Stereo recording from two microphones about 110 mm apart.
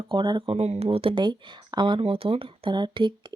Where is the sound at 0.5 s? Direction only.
75° right (ahead or behind).